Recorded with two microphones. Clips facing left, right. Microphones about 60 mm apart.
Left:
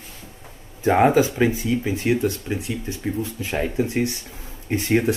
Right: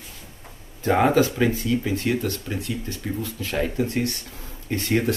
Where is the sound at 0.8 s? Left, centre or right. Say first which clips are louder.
Left 2 dB; centre.